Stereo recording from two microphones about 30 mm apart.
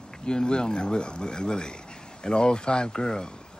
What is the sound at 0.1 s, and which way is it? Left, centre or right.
Speech, left.